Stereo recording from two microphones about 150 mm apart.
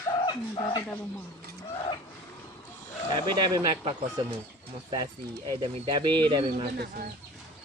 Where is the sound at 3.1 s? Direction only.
30° right (ahead or behind).